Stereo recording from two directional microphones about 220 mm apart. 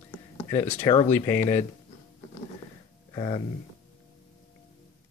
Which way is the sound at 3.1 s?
20° left (ahead or behind).